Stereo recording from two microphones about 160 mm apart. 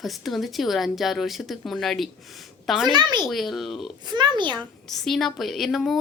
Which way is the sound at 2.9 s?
25° right (ahead or behind).